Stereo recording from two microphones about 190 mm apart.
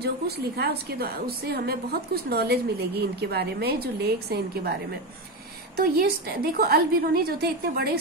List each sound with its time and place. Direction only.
0.0 s a woman's voice: 60° right (ahead or behind)
5.8 s a woman's voice: 55° right (ahead or behind)